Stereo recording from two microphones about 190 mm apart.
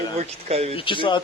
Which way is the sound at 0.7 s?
25° left (ahead or behind).